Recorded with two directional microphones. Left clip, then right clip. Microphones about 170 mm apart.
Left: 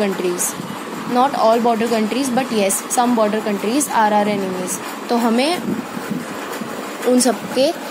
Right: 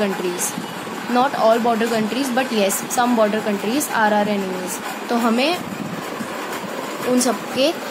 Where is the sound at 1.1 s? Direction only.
15° left (ahead or behind).